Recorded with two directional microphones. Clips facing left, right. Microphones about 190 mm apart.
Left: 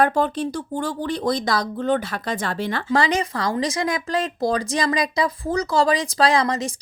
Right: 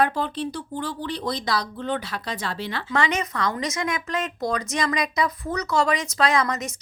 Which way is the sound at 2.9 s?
35° left (ahead or behind).